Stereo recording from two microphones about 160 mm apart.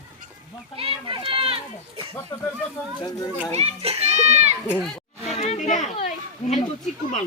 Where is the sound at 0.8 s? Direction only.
35° right (ahead or behind).